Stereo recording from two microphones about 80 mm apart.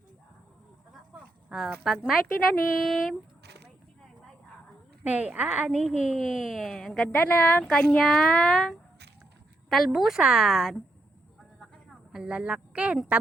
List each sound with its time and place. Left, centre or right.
1.2 s a sound: centre
1.8 s a woman's voice: centre
5.0 s a woman's voice: centre
5.7 s a woman's voice: centre
7.1 s a woman's voice: left
7.7 s a woman's voice: centre
11.9 s a woman's voice: centre